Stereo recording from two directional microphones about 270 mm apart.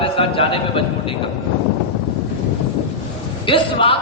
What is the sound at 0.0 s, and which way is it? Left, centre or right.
Speech, centre.